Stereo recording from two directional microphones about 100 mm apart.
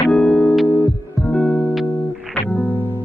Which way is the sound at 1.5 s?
25° left (ahead or behind).